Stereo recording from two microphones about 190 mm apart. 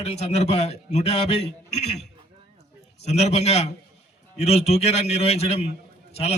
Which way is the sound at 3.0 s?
35° left (ahead or behind).